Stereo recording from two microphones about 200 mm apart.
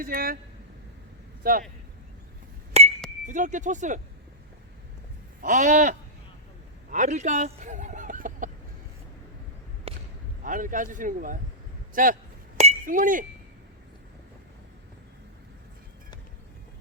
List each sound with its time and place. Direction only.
0.0 s speech: 45° right (ahead or behind)
1.4 s speech: 45° right (ahead or behind)
2.8 s chink: 30° right (ahead or behind)
3.2 s speech: 40° right (ahead or behind)
5.4 s speech: 40° right (ahead or behind)
9.9 s whip: 30° right (ahead or behind)
10.4 s speech: 40° right (ahead or behind)
12.5 s chink: 35° right (ahead or behind)